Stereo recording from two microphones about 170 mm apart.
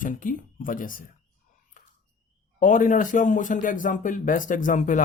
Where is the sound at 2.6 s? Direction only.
50° left (ahead or behind).